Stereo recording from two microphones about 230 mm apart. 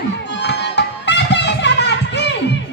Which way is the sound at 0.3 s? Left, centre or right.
Left.